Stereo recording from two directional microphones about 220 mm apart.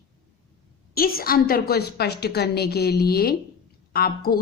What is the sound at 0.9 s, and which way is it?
A woman's voice, 45° left (ahead or behind).